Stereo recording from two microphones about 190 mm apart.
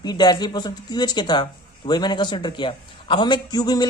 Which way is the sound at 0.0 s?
20° left (ahead or behind).